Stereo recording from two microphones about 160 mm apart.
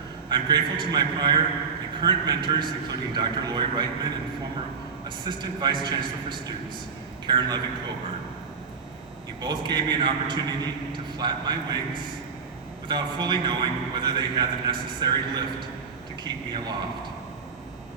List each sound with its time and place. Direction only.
0.3 s a man's voice: 25° right (ahead or behind)
5.0 s a man's voice: 30° right (ahead or behind)
9.4 s a man's voice: 25° right (ahead or behind)
12.9 s a man's voice: 30° right (ahead or behind)